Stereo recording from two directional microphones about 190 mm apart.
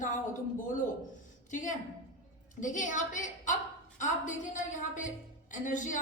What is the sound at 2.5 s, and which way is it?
A woman's voice, 40° left (ahead or behind).